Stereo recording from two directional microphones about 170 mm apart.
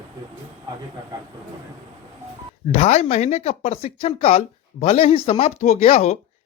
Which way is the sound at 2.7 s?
40° left (ahead or behind).